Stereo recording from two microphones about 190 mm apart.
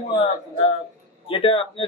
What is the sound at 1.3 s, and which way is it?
Speech, 30° left (ahead or behind).